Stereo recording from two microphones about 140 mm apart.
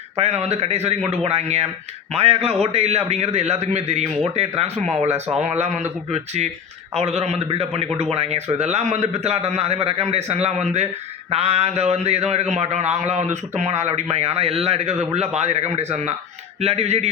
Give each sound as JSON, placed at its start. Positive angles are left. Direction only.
{"t": 0.2, "sound": "a man's voice", "side_deg": -50}